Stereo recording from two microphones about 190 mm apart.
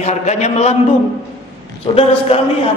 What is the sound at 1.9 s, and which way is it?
Speech, 25° left (ahead or behind).